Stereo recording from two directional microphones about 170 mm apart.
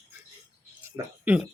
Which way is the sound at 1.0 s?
20° right (ahead or behind).